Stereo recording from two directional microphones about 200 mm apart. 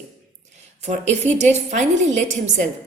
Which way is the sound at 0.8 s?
35° right (ahead or behind).